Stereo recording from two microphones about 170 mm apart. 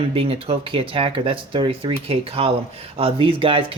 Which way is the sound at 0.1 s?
35° right (ahead or behind).